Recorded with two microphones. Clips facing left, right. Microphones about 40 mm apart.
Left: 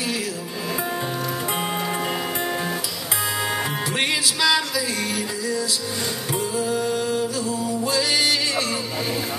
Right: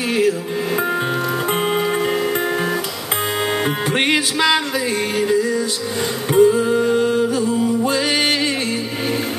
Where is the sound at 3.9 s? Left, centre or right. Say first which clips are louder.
Right 5 dB; right.